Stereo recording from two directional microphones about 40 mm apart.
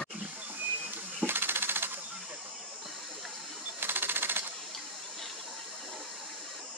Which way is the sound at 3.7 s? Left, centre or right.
Right.